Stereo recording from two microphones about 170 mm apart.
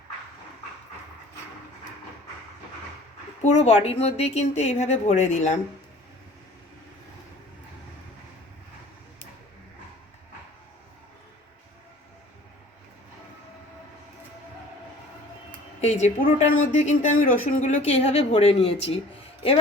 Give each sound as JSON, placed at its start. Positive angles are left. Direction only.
{"t": 3.4, "sound": "speech", "side_deg": 40}
{"t": 15.8, "sound": "speech", "side_deg": 40}